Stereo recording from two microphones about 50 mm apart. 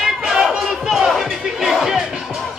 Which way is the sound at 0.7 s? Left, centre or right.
Centre.